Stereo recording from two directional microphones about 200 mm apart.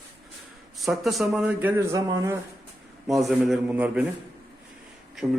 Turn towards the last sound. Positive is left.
turn(degrees=0)  # may be behind; listen again after turning